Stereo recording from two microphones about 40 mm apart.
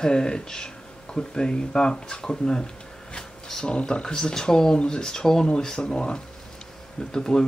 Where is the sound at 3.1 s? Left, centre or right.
Centre.